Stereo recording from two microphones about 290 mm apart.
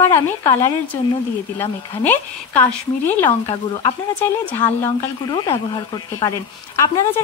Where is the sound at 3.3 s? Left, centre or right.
Left.